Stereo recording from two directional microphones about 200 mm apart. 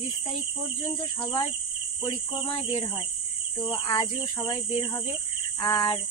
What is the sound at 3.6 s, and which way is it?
Speech, 20° left (ahead or behind).